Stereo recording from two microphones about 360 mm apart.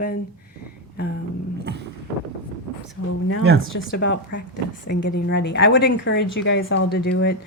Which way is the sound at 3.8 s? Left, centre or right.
Left.